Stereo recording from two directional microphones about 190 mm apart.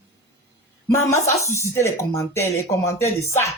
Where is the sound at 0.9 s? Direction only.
15° left (ahead or behind).